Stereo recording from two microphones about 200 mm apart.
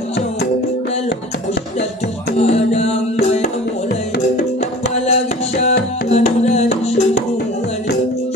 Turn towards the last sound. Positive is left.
turn(degrees=30)  # may be behind; listen again after turning